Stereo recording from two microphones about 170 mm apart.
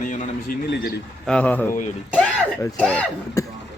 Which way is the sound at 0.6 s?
75° left (ahead or behind).